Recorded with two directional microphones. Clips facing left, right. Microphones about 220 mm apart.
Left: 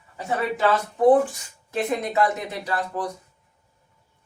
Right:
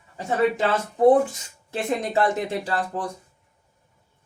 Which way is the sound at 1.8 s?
30° right (ahead or behind).